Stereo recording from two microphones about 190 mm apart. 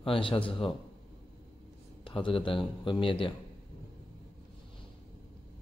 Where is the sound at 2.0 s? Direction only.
25° left (ahead or behind).